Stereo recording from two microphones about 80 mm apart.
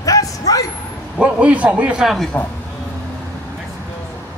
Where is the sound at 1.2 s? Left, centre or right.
Centre.